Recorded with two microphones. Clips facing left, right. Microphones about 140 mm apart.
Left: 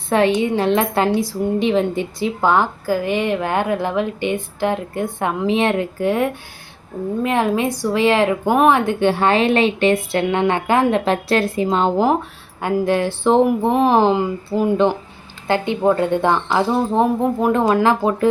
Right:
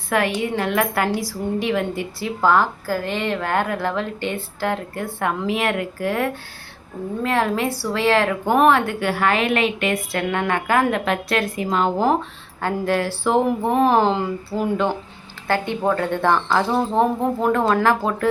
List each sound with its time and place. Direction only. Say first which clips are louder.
0.1 s a woman's voice: left 5 dB; 25° left (ahead or behind)
12.6 s speech: left 3 dB; 20° left (ahead or behind)